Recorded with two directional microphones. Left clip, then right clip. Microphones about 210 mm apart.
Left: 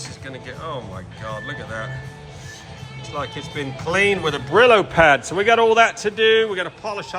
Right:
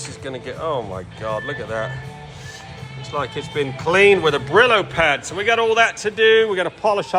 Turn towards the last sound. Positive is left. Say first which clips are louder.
# right 7 dB
turn(degrees=0)  # may be behind; listen again after turning